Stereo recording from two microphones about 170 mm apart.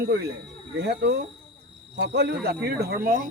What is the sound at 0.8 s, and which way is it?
Speech, 80° right.